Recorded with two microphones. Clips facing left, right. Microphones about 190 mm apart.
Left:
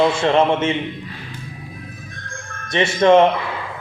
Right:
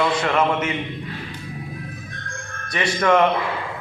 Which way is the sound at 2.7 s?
25° left (ahead or behind).